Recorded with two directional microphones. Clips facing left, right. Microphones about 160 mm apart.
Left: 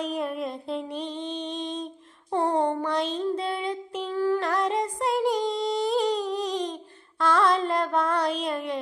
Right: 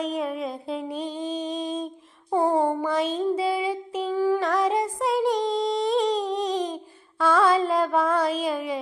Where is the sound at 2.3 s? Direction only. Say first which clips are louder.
Right 2 dB; 5° right (ahead or behind).